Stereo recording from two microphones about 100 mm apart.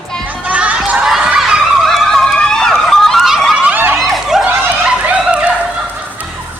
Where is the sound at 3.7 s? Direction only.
20° right (ahead or behind).